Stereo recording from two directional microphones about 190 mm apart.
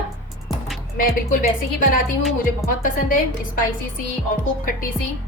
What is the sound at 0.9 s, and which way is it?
Speech, 45° left (ahead or behind).